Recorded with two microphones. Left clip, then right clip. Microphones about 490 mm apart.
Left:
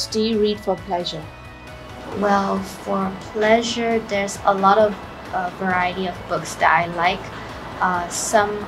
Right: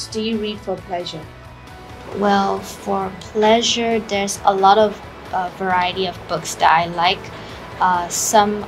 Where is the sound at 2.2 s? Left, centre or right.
Right.